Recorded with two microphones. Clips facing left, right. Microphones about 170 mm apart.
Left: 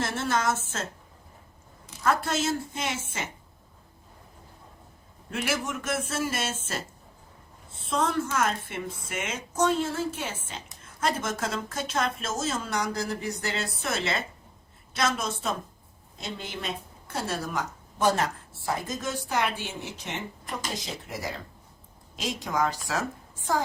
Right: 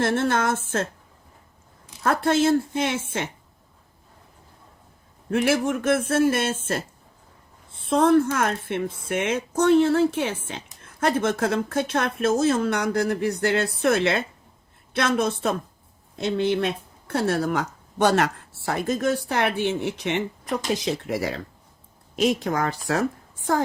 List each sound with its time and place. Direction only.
0.0 s a woman's voice: 55° right (ahead or behind)
2.0 s a woman's voice: 55° right (ahead or behind)
5.3 s a woman's voice: 55° right (ahead or behind)
7.9 s a woman's voice: 55° right (ahead or behind); by 21.4 s 70° right (ahead or behind)
22.1 s a woman's voice: 60° right (ahead or behind)